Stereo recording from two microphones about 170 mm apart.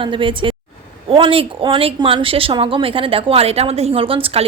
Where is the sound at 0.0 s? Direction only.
30° right (ahead or behind).